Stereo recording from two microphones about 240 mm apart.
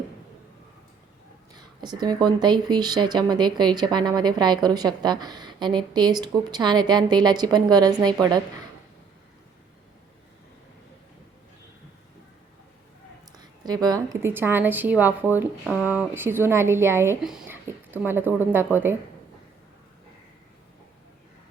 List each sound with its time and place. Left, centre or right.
1.5 s speech: centre
13.4 s speech: centre